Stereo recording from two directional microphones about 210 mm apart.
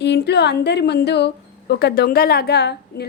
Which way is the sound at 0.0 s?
55° left (ahead or behind).